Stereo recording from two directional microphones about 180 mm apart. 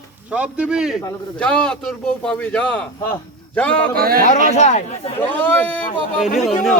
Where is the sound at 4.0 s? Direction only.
55° right (ahead or behind).